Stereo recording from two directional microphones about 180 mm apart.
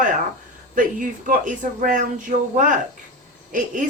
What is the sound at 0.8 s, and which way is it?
Speech, 50° right (ahead or behind).